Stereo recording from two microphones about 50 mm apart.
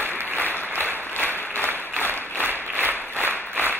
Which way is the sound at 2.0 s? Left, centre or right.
Right.